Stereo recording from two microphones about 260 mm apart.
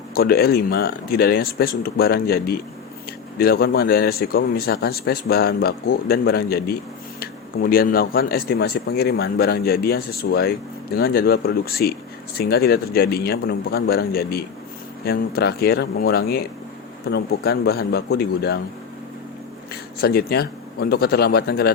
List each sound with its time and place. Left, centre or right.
0.1 s a man's voice: left
19.7 s a man's voice: left